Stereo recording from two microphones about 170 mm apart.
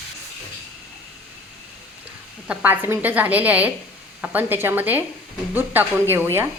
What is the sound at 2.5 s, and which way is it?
Speech, 10° right (ahead or behind).